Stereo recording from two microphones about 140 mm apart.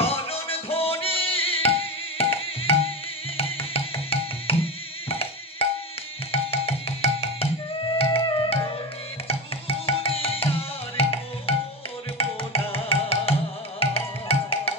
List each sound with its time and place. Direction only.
0.0 s music: 45° left (ahead or behind)
8.0 s music: 40° left (ahead or behind)
11.0 s tabla: 45° left (ahead or behind)
12.2 s music: 40° left (ahead or behind)